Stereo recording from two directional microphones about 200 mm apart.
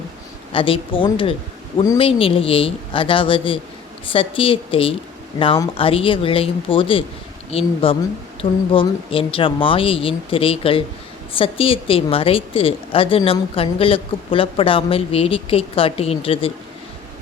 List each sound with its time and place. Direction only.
0.5 s a woman's voice: 25° left (ahead or behind)